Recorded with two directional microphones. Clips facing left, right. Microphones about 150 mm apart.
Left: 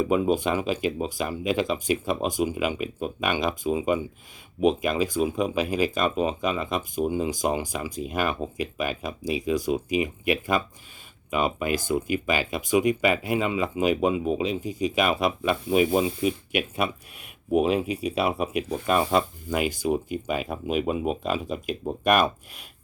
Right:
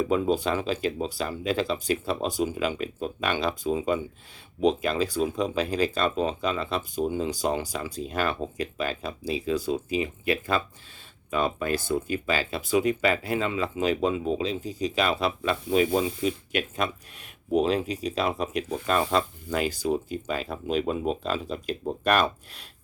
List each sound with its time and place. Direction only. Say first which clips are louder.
0.0 s speech: left 2 dB; 10° left (ahead or behind)